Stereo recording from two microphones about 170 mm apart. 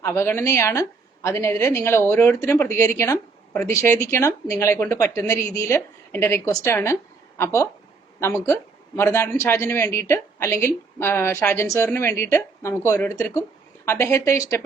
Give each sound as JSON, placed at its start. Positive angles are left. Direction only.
{"t": 0.0, "sound": "a woman's voice", "side_deg": 15}